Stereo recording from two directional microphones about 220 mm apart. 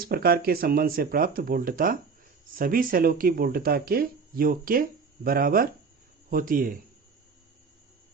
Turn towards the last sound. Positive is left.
turn(degrees=-40)  # may be behind; listen again after turning